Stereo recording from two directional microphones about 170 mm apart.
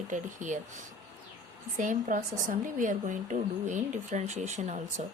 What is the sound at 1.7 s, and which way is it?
A woman's voice, 50° right (ahead or behind).